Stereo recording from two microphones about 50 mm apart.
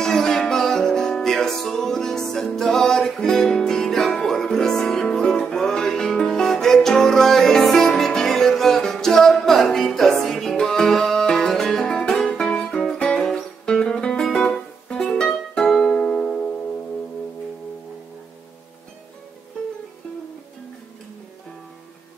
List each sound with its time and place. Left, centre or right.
0.0 s music: centre